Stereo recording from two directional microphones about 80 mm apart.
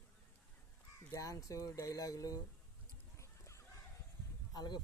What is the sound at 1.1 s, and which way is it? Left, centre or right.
Speech, left.